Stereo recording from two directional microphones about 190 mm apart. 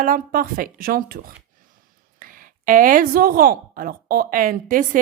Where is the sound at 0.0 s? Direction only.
45° right (ahead or behind).